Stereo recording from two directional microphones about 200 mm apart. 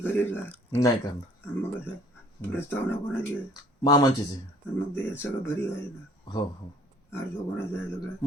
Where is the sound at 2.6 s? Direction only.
10° left (ahead or behind).